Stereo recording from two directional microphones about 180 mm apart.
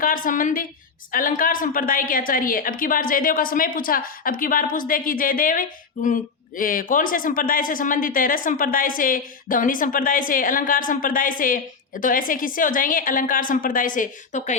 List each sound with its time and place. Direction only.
0.0 s a woman's voice: 50° left (ahead or behind)